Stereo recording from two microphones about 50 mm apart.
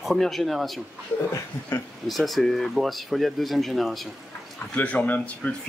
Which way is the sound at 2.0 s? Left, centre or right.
Centre.